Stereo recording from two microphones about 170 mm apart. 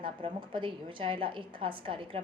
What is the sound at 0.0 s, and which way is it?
A woman's voice, 30° right (ahead or behind).